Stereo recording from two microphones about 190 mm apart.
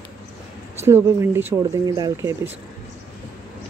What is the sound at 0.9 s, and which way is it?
Speech, 10° right (ahead or behind).